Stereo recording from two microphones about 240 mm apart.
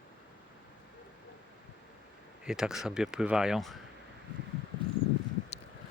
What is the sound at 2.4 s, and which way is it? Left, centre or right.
Speech, centre.